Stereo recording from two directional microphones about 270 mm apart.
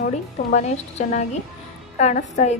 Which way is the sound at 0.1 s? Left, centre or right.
Left.